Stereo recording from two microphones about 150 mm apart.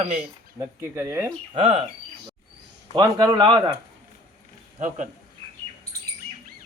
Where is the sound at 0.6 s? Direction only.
20° right (ahead or behind).